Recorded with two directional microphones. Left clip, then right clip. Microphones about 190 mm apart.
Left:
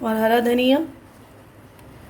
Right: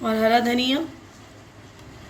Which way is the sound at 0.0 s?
40° left (ahead or behind).